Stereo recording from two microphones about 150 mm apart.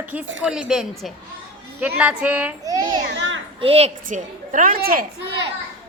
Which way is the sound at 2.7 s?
25° right (ahead or behind).